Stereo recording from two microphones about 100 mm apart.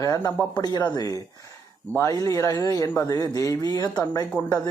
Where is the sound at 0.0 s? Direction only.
35° left (ahead or behind).